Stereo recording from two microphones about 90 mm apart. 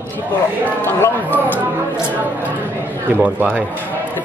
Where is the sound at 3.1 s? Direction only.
15° right (ahead or behind).